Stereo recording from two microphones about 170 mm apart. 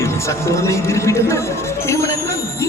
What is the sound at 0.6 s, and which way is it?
Speech, 15° left (ahead or behind).